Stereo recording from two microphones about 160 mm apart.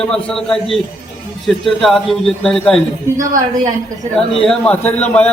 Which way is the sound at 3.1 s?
55° right (ahead or behind).